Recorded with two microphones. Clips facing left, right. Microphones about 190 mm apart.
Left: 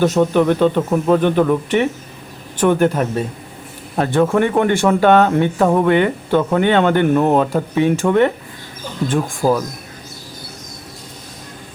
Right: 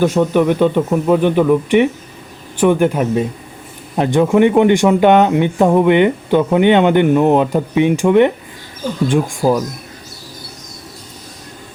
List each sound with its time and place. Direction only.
0.0 s speech: 10° right (ahead or behind)